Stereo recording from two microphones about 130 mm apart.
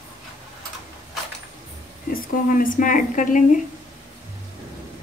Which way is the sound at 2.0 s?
90° left.